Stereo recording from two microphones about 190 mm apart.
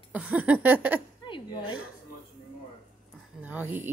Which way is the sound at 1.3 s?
25° left (ahead or behind).